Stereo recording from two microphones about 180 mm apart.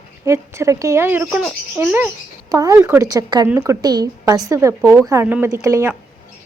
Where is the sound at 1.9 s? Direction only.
15° right (ahead or behind).